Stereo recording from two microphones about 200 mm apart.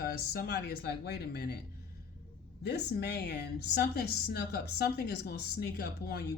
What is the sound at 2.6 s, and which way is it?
A woman's voice, 55° left (ahead or behind).